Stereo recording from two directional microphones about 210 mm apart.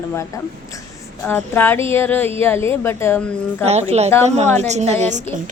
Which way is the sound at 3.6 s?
30° right (ahead or behind).